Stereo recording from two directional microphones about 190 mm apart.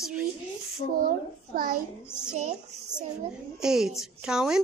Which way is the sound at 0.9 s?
50° right (ahead or behind).